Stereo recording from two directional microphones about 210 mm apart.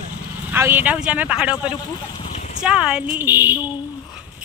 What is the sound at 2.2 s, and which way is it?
Horse, 30° left (ahead or behind).